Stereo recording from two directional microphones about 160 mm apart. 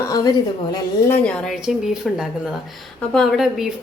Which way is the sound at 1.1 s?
5° left (ahead or behind).